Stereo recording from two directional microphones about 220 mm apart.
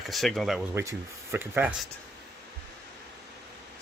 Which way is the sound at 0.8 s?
10° right (ahead or behind).